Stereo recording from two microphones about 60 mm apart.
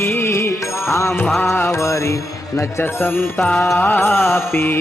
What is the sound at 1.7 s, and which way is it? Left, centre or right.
Mantra, left.